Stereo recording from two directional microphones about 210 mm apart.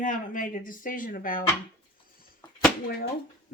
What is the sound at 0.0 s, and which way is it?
Speech, 40° left (ahead or behind).